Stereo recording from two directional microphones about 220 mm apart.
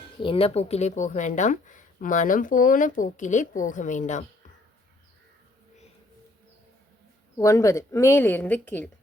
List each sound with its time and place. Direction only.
0.2 s speech: 25° left (ahead or behind)
7.3 s a woman's voice: 15° left (ahead or behind)